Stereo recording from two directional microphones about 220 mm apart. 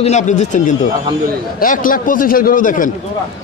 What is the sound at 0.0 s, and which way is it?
A man's voice, 30° left (ahead or behind).